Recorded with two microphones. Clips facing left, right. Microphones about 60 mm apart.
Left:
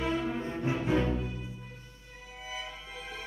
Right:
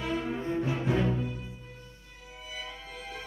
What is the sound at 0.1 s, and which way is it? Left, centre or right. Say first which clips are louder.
Music: even; centre.